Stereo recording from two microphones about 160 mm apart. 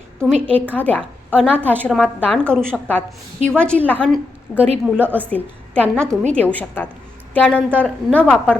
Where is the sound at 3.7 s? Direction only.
10° left (ahead or behind).